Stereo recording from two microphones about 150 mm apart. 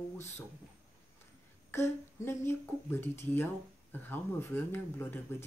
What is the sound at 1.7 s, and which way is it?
Speech, 15° left (ahead or behind).